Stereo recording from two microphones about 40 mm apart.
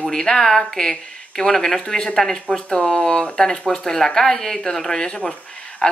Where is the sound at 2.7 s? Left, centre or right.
Left.